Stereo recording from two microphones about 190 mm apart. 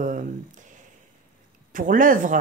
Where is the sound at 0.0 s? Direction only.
45° right (ahead or behind).